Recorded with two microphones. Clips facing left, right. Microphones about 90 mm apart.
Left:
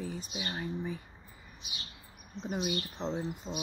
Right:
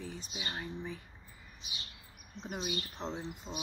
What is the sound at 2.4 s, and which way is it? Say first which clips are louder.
Speech: left 5 dB; 30° left (ahead or behind).